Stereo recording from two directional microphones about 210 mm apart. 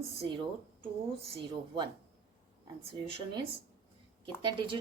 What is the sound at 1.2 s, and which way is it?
Speech, 20° right (ahead or behind).